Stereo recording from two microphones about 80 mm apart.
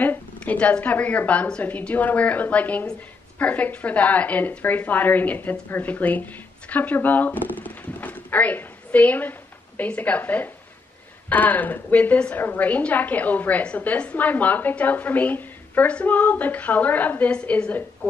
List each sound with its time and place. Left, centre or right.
0.0 s a woman's voice: left